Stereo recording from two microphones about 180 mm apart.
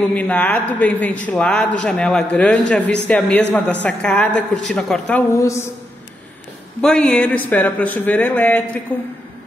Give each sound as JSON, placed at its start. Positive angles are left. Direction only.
{"t": 0.1, "sound": "a man's voice", "side_deg": 5}
{"t": 5.4, "sound": "a man's voice", "side_deg": 15}
{"t": 6.8, "sound": "a man's voice", "side_deg": 5}